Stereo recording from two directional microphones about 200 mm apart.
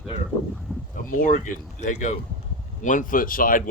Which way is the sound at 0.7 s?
5° left (ahead or behind).